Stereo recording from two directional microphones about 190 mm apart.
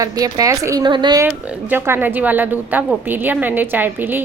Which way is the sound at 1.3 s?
10° right (ahead or behind).